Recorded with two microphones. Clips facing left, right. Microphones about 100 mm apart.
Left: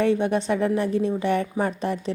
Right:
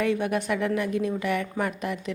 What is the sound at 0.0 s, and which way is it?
A woman's voice, 30° left (ahead or behind).